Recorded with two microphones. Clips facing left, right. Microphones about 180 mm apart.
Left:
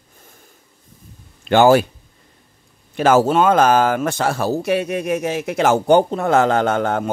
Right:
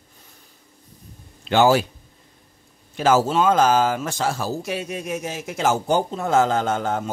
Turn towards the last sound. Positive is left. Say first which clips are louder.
# left 5 dB
turn(degrees=65)  # may be behind; listen again after turning